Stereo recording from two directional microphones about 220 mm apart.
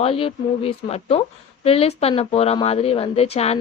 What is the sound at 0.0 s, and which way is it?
Speech, 25° left (ahead or behind).